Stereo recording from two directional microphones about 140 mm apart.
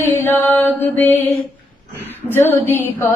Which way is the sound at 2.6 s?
15° right (ahead or behind).